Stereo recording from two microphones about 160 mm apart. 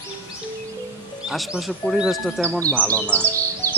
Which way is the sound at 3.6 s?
10° left (ahead or behind).